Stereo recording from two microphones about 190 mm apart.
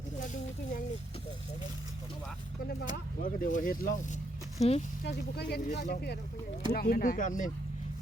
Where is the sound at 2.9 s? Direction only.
45° left (ahead or behind).